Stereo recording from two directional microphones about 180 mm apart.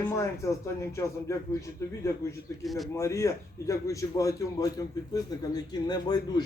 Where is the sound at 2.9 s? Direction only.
15° left (ahead or behind).